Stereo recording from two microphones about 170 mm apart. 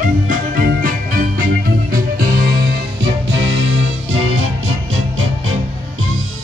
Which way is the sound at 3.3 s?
90° right.